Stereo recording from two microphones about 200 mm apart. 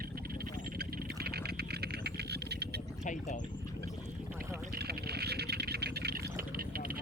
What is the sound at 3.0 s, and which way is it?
Speech, 35° left (ahead or behind).